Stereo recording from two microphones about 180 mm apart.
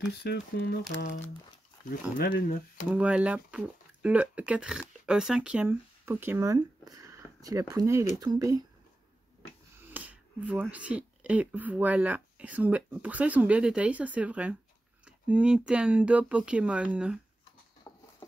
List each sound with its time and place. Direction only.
0.2 s speech: 65° left (ahead or behind)
1.9 s speech: 55° left (ahead or behind)
2.9 s speech: 5° right (ahead or behind)
9.8 s speech: 10° right (ahead or behind)
17.9 s a sound: 10° left (ahead or behind)